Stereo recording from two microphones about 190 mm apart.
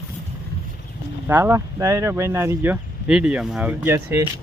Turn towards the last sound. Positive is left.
turn(degrees=-10)  # may be behind; listen again after turning